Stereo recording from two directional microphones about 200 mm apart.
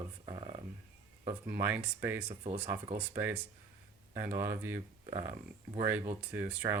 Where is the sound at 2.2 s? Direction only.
35° right (ahead or behind).